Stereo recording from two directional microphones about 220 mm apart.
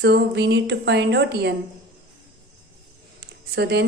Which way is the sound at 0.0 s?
50° right (ahead or behind).